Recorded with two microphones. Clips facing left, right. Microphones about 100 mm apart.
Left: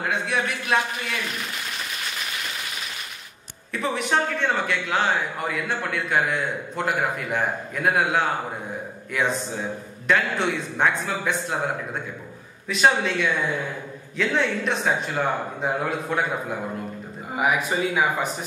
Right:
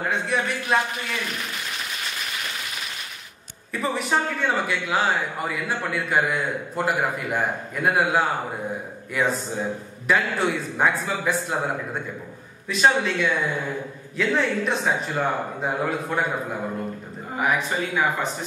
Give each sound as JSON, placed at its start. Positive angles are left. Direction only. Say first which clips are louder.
{"t": 0.0, "sound": "a man's voice", "louder": "right 1 dB", "side_deg": 0}
{"t": 3.8, "sound": "a man's voice", "louder": "even", "side_deg": 0}
{"t": 17.6, "sound": "speech", "louder": "left 1 dB", "side_deg": 10}